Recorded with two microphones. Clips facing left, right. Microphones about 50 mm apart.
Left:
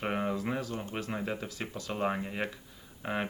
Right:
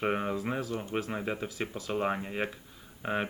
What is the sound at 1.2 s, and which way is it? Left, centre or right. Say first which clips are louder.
Speech: right 2 dB; centre.